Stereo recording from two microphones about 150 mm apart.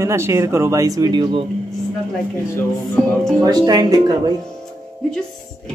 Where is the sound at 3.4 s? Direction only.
25° right (ahead or behind).